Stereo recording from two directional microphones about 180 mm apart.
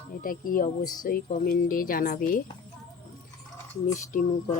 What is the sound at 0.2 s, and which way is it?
Speech, 50° left (ahead or behind).